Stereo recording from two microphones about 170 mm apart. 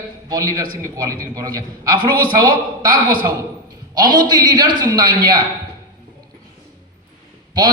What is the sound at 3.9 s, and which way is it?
A man's voice, 25° right (ahead or behind).